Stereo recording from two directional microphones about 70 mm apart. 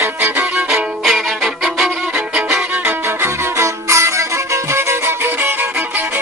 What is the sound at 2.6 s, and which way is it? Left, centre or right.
Music, right.